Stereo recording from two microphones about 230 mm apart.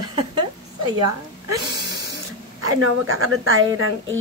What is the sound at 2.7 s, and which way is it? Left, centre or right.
A woman's voice, right.